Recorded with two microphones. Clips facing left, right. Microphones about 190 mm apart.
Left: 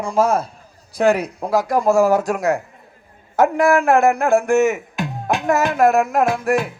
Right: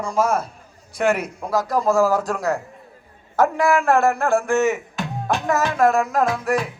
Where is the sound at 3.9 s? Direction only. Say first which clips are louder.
Left 3 dB; 20° left (ahead or behind).